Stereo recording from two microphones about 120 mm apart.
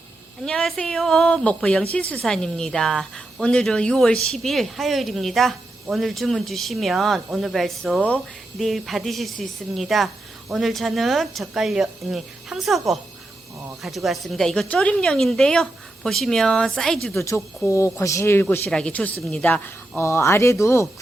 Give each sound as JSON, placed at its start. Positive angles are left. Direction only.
{"t": 0.4, "sound": "a woman's voice", "side_deg": 5}
{"t": 13.8, "sound": "a woman's voice", "side_deg": 0}
{"t": 17.2, "sound": "speech", "side_deg": 25}
{"t": 18.7, "sound": "speech", "side_deg": 5}